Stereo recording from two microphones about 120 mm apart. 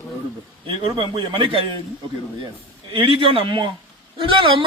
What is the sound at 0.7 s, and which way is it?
Speech, 45° right (ahead or behind).